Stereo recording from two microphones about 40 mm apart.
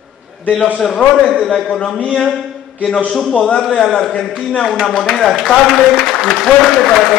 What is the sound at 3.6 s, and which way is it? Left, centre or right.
Speech, centre.